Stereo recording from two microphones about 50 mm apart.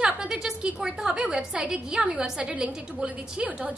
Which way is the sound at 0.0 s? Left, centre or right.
Centre.